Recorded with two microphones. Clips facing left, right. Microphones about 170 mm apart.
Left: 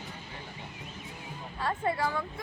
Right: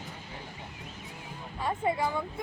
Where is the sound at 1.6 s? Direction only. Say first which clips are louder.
Right 1 dB; 20° right (ahead or behind).